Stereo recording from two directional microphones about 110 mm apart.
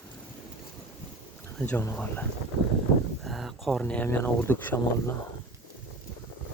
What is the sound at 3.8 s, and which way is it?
Speech, 15° left (ahead or behind).